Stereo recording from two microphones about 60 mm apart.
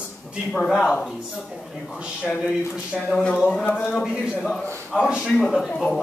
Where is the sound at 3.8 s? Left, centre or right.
Centre.